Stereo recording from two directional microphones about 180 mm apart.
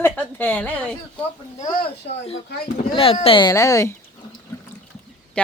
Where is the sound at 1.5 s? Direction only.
40° left (ahead or behind).